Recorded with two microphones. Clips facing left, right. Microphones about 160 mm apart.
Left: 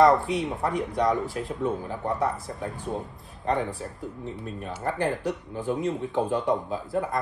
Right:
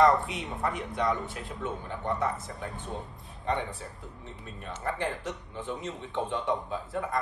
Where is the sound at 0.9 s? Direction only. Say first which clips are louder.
Left 5 dB; 40° left (ahead or behind).